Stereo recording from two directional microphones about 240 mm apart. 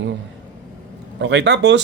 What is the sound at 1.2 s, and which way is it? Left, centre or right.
Speech, right.